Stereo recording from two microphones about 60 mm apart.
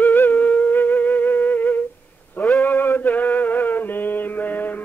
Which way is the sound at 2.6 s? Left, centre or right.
Left.